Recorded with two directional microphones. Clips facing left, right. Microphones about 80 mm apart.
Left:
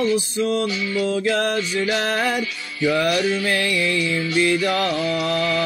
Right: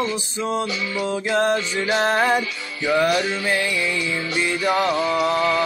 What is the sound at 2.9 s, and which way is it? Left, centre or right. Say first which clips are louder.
Music: even; right.